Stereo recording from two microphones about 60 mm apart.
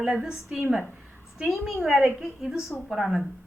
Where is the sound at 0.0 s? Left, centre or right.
Centre.